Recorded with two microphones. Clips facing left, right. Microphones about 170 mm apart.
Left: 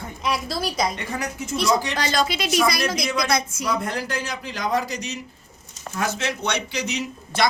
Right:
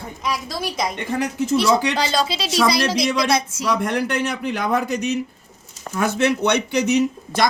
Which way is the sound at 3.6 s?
75° right (ahead or behind).